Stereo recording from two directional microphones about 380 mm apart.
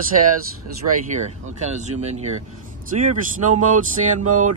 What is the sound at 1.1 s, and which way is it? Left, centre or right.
Speech, centre.